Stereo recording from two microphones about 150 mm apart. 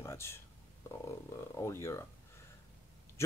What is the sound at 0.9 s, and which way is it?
Speech, 15° left (ahead or behind).